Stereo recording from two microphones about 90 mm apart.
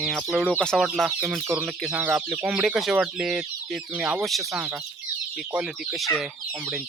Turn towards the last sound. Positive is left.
turn(degrees=-10)  # may be behind; listen again after turning